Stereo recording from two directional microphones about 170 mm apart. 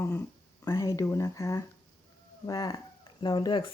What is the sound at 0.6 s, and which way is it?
Speech, 20° left (ahead or behind).